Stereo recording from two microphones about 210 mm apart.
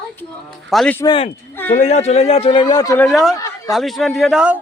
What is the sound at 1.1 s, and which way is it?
A man's voice, 25° left (ahead or behind).